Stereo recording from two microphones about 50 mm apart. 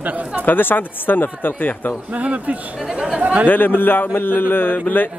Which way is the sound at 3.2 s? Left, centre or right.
Right.